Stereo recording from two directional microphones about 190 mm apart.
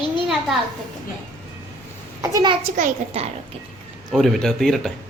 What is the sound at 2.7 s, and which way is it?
Speech, 40° right (ahead or behind).